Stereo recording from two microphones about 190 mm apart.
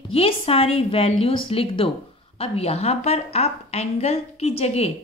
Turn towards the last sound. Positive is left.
turn(degrees=35)  # may be behind; listen again after turning